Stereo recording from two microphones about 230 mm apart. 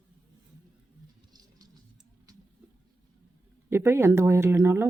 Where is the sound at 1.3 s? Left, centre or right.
Centre.